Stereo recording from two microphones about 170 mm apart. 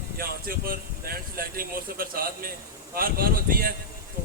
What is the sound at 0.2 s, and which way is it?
A man's voice, 60° right (ahead or behind).